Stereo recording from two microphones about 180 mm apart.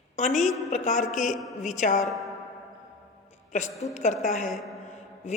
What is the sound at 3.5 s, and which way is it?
A woman's voice, 40° left (ahead or behind).